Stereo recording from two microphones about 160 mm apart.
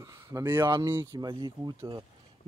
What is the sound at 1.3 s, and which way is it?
Speech, 30° right (ahead or behind).